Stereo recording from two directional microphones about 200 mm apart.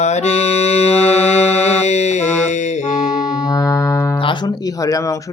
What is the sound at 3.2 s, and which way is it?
Music, 15° left (ahead or behind).